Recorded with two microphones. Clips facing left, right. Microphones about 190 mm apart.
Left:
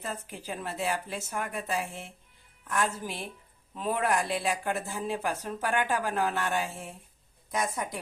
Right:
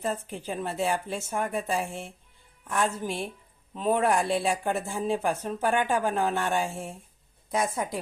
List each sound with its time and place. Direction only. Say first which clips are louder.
0.0 s speech: right 7 dB; 25° right (ahead or behind)